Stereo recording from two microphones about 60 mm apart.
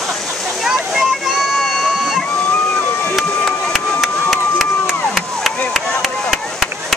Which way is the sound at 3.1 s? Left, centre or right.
Centre.